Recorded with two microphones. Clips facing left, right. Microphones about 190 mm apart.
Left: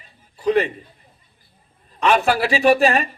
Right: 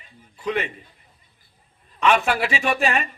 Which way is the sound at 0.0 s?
35° left (ahead or behind).